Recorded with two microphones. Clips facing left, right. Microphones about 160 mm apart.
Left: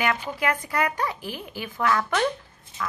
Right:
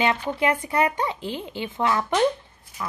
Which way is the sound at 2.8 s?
25° left (ahead or behind).